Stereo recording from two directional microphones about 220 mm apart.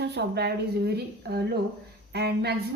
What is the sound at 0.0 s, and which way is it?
A woman's voice, 50° right (ahead or behind).